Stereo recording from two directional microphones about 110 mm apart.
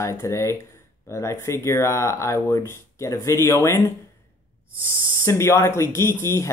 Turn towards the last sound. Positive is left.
turn(degrees=25)  # may be behind; listen again after turning